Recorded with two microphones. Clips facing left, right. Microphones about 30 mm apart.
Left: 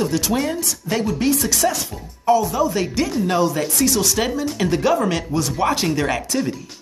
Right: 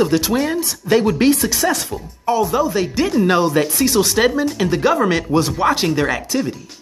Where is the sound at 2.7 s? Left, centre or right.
Centre.